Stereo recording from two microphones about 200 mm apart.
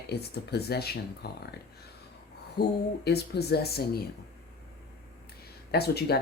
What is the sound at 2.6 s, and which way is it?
Speech, 55° left (ahead or behind).